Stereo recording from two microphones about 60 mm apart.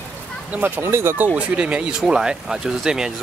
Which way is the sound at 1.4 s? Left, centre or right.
Right.